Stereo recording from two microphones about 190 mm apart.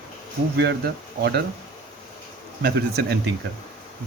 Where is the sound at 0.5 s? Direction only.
60° right (ahead or behind).